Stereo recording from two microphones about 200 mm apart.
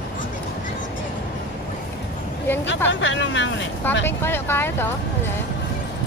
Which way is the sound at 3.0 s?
65° left (ahead or behind).